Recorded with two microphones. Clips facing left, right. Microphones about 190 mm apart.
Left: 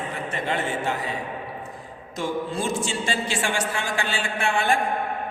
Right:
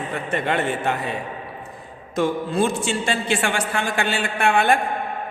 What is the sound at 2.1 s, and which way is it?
A man's voice, 60° right (ahead or behind).